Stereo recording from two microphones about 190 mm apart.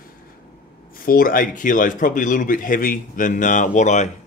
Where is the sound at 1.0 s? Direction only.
50° left (ahead or behind).